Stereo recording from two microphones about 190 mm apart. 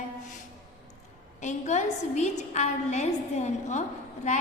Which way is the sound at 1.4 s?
40° left (ahead or behind).